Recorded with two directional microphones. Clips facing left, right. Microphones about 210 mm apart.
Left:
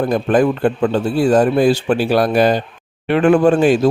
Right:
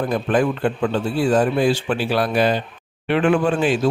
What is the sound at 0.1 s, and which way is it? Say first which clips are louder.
Speech: left 4 dB; 40° left (ahead or behind).